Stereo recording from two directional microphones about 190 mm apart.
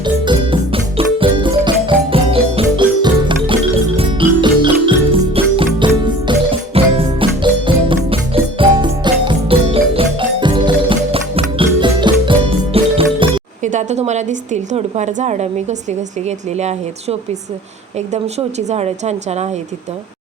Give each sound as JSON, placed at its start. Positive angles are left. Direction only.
{"t": 0.0, "sound": "music", "side_deg": -25}
{"t": 16.6, "sound": "a woman's voice", "side_deg": -35}